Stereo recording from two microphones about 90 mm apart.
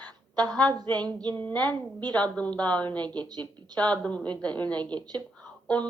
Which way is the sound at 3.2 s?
50° right (ahead or behind).